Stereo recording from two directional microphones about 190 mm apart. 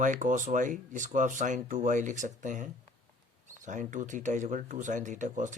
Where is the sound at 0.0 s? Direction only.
40° right (ahead or behind).